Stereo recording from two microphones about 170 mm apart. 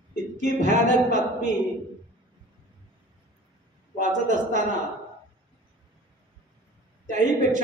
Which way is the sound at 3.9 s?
45° right (ahead or behind).